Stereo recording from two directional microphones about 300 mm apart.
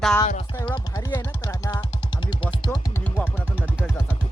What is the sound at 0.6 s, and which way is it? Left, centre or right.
Speech, centre.